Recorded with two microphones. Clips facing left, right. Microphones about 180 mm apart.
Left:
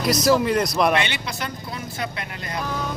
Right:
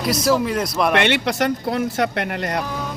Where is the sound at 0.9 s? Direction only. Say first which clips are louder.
Right 7 dB; 70° right (ahead or behind).